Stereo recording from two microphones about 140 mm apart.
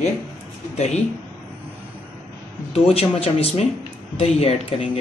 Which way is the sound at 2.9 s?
45° left (ahead or behind).